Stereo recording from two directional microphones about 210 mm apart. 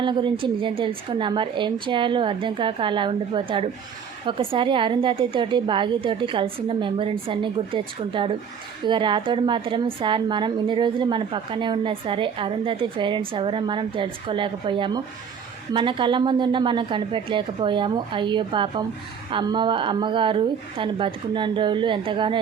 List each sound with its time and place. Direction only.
0.0 s a woman's voice: 20° right (ahead or behind)